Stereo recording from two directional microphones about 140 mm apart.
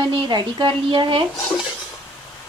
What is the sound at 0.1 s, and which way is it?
A woman's voice, 35° right (ahead or behind).